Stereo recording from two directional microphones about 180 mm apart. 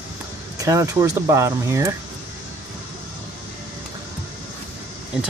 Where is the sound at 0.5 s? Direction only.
20° right (ahead or behind).